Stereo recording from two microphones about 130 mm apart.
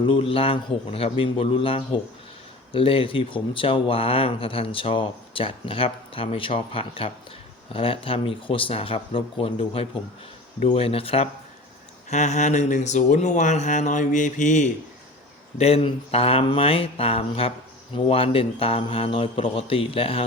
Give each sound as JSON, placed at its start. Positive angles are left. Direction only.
{"t": 0.0, "sound": "speech", "side_deg": 45}
{"t": 12.1, "sound": "speech", "side_deg": 65}
{"t": 15.5, "sound": "speech", "side_deg": 50}